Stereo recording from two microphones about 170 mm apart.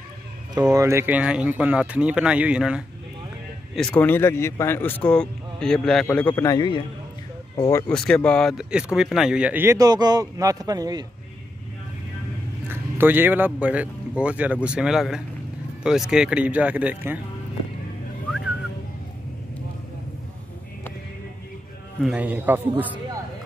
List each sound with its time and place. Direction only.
0.6 s speech: 20° right (ahead or behind); by 2.8 s 5° right (ahead or behind)
3.7 s a man's voice: 5° left (ahead or behind); by 6.8 s 25° left (ahead or behind)
7.9 s speech: 5° left (ahead or behind); by 11.1 s 20° right (ahead or behind)
12.6 s speech: 10° right (ahead or behind)
22.0 s speech: 10° right (ahead or behind)